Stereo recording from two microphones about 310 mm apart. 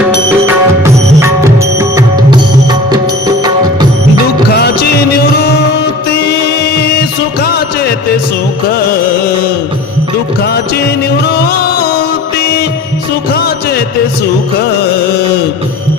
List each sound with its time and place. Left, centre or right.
0.4 s music: centre
4.5 s music: left
7.4 s music: left
11.4 s music: left